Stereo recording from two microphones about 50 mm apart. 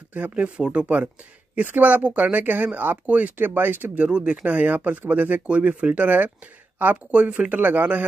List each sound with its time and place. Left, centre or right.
0.1 s speech: right
5.5 s speech: right